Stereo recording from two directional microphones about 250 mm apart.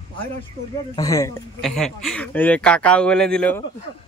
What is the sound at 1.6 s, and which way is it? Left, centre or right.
Speech, centre.